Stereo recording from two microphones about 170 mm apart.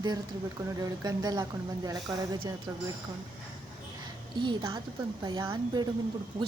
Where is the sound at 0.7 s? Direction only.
20° right (ahead or behind).